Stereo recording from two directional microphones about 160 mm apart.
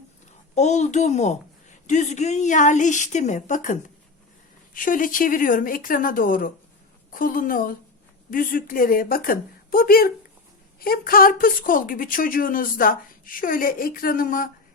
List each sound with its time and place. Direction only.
0.5 s a woman's voice: 45° left (ahead or behind)